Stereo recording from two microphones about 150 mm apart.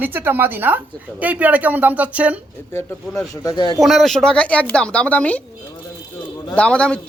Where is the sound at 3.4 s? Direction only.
25° left (ahead or behind).